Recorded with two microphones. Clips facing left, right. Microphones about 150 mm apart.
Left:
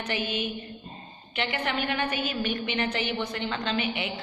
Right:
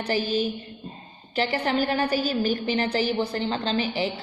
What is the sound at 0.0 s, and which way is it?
A woman's voice, 35° right (ahead or behind).